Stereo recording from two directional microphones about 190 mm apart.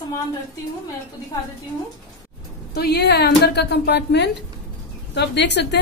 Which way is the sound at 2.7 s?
55° left (ahead or behind).